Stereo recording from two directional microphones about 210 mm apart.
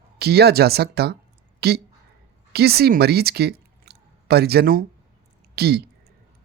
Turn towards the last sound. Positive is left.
turn(degrees=-50)  # may be behind; listen again after turning